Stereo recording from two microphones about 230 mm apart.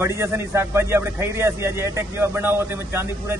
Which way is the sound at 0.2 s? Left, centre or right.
Centre.